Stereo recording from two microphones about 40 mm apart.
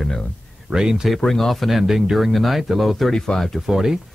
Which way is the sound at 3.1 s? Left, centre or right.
Centre.